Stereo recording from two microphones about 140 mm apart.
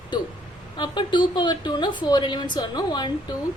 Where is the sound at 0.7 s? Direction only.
35° left (ahead or behind).